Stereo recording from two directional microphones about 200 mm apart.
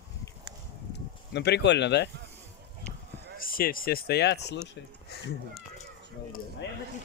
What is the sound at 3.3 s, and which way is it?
Speech, 45° left (ahead or behind).